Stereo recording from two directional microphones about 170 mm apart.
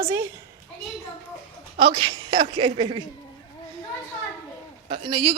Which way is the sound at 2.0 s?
30° right (ahead or behind).